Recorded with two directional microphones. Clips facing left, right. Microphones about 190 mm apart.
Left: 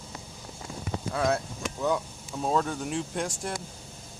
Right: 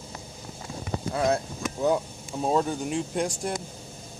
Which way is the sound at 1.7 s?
30° right (ahead or behind).